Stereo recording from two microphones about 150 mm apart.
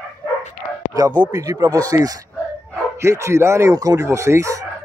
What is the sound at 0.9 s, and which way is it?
Speech, 25° right (ahead or behind).